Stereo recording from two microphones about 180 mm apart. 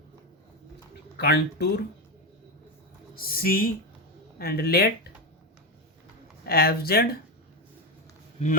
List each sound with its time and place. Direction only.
1.1 s speech: 60° left (ahead or behind)
3.2 s speech: 55° left (ahead or behind)
6.4 s speech: 60° left (ahead or behind)